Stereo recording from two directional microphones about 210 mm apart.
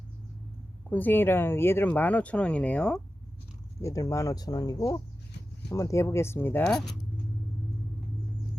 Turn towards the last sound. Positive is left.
turn(degrees=5)  # may be behind; listen again after turning